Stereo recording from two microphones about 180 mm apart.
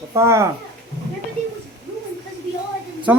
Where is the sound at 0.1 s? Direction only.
15° right (ahead or behind).